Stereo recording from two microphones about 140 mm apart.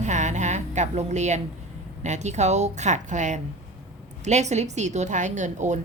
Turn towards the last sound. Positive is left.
turn(degrees=-60)  # may be behind; listen again after turning